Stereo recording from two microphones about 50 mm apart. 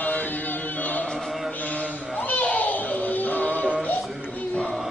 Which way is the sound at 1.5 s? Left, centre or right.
Left.